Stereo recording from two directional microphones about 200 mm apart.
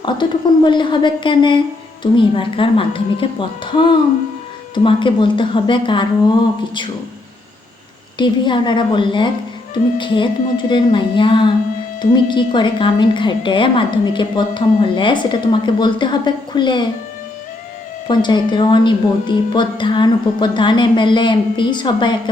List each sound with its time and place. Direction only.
0.0 s a woman's voice: 20° left (ahead or behind)
8.2 s a woman's voice: 25° left (ahead or behind)
18.1 s a woman's voice: 20° left (ahead or behind)